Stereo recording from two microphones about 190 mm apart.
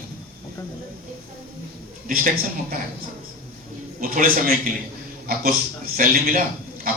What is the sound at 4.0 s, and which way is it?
A man's voice, 45° right (ahead or behind).